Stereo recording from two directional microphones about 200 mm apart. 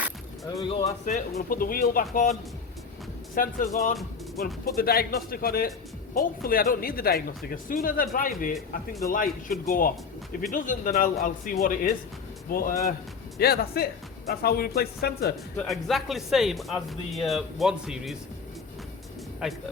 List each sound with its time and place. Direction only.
0.4 s speech: 15° left (ahead or behind)
0.7 s speech: 35° left (ahead or behind)
1.4 s speech: 45° left (ahead or behind)
15.5 s speech: centre (ahead or behind)
19.4 s speech: centre (ahead or behind)